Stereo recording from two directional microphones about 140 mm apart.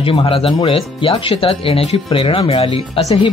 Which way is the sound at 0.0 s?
45° left (ahead or behind).